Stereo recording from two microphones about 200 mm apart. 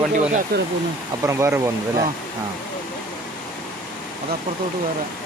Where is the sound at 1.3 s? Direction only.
15° right (ahead or behind).